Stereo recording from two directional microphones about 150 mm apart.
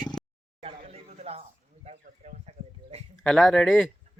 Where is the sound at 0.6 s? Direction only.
40° right (ahead or behind).